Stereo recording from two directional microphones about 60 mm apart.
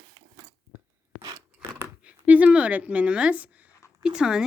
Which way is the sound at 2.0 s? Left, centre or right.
Right.